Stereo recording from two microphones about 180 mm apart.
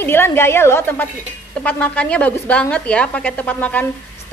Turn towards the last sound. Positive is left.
turn(degrees=10)  # may be behind; listen again after turning